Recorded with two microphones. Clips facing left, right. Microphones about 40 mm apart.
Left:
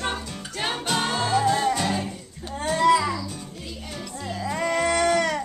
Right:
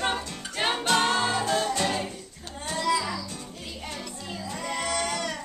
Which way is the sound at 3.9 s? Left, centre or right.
Centre.